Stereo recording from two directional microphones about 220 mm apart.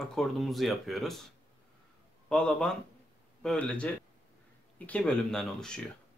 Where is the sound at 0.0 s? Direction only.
Centre (ahead or behind).